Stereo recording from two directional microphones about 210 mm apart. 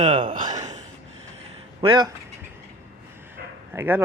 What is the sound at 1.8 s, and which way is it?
Speech, 20° right (ahead or behind).